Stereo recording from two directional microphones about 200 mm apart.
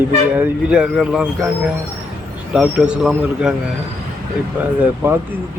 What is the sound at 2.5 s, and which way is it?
A man's voice, 5° right (ahead or behind).